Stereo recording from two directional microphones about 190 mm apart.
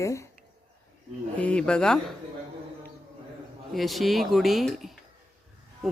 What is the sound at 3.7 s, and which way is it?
Speech, centre (ahead or behind).